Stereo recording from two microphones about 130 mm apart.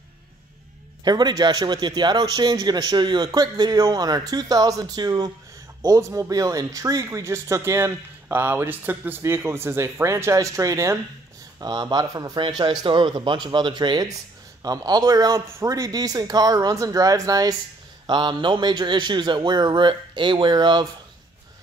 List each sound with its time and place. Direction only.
1.0 s a man's voice: 35° right (ahead or behind)